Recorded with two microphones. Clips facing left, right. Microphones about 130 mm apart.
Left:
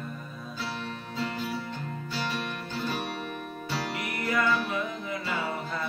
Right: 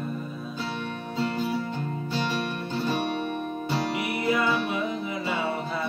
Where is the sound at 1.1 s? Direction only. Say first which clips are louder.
Right 5 dB; 25° right (ahead or behind).